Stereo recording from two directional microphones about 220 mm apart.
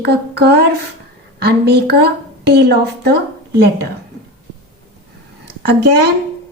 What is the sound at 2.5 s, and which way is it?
Speech, 45° right (ahead or behind).